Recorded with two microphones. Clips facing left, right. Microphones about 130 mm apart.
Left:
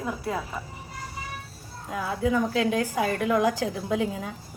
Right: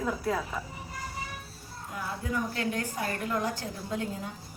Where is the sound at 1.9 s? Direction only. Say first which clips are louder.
Left 9 dB; 90° left.